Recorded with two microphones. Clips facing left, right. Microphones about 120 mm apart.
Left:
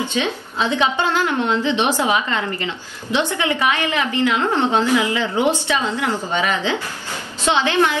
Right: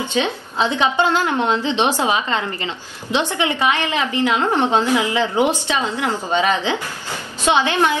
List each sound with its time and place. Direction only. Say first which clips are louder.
0.2 s a woman's voice: right 5 dB; 20° right (ahead or behind)